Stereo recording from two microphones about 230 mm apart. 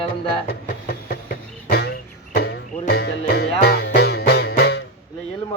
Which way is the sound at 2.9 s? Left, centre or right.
Left.